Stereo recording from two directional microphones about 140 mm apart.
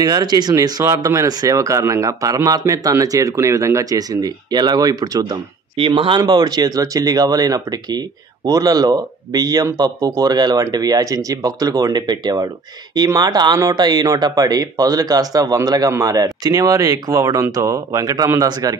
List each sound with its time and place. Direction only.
0.0 s speech: 30° right (ahead or behind)
5.8 s speech: 40° right (ahead or behind)